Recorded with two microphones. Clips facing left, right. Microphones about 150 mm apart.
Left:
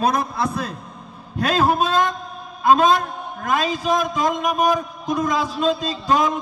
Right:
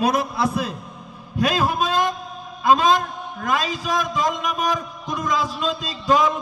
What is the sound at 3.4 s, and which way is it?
A man's voice, 50° left (ahead or behind).